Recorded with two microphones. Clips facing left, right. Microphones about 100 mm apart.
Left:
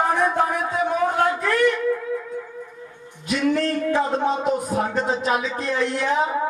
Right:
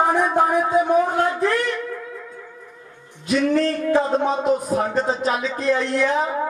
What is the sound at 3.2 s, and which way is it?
Speech, 35° right (ahead or behind).